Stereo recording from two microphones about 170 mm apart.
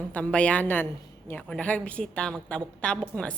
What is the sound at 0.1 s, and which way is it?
A woman's voice, 5° left (ahead or behind).